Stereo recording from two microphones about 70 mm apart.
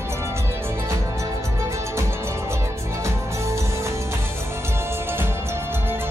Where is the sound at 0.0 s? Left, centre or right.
Right.